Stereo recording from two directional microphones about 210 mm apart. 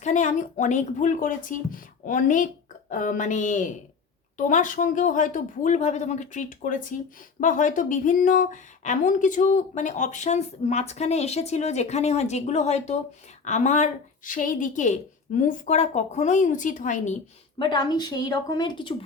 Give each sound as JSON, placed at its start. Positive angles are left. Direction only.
{"t": 0.0, "sound": "a woman's voice", "side_deg": 35}
{"t": 17.6, "sound": "a woman's voice", "side_deg": 20}